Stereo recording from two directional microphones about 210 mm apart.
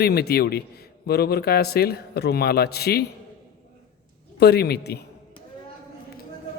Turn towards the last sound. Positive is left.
turn(degrees=50)  # may be behind; listen again after turning